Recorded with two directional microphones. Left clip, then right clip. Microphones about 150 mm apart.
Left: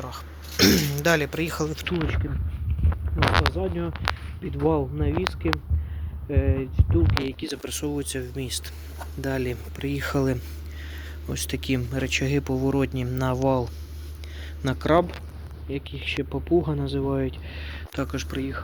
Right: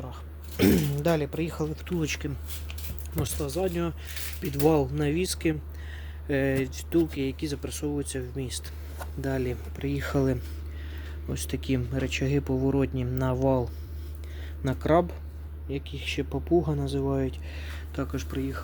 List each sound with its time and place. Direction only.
0.1 s throat clearing: 20° right (ahead or behind)
1.7 s speech: 5° right (ahead or behind)
3.5 s speech: 10° right (ahead or behind); by 7.0 s 30° right (ahead or behind)
7.3 s speech: 10° right (ahead or behind)